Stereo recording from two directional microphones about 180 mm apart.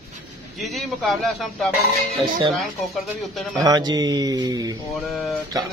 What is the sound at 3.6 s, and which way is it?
Speech, 20° right (ahead or behind).